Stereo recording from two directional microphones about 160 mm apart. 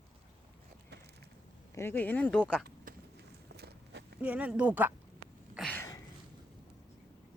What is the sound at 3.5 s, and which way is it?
Walk, 90° right.